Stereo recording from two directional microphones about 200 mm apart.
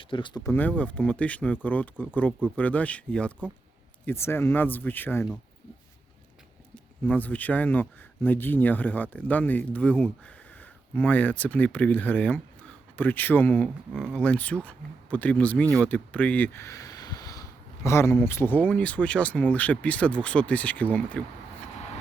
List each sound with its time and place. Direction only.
0.0 s speech: 25° left (ahead or behind)
0.5 s speech: 10° left (ahead or behind)
6.7 s speech: 5° left (ahead or behind)